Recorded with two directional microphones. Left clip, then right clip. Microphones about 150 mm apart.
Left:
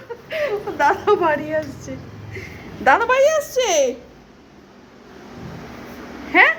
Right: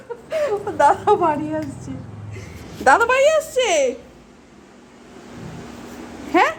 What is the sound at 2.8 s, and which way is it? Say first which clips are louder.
Speech: even; 20° right (ahead or behind).